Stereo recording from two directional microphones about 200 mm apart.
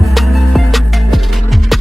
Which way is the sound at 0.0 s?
Centre (ahead or behind).